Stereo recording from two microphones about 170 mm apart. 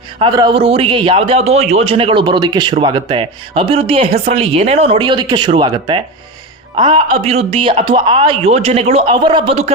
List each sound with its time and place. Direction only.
0.2 s speech: 25° right (ahead or behind)